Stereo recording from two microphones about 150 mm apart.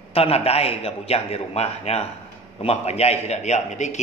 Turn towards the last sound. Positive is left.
turn(degrees=50)  # may be behind; listen again after turning